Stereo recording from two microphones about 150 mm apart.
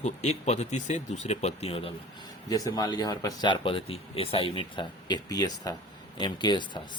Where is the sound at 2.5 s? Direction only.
25° left (ahead or behind).